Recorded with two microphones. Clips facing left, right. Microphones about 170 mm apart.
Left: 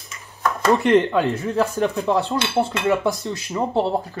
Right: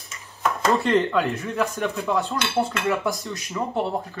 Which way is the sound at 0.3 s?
20° left (ahead or behind).